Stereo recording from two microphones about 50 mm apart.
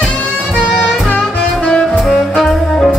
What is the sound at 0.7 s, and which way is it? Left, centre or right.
Music, left.